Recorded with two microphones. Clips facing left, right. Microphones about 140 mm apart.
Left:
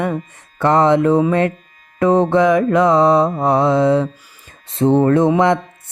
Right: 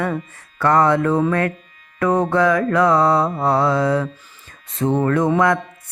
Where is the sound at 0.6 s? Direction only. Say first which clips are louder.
Left 3 dB; 20° left (ahead or behind).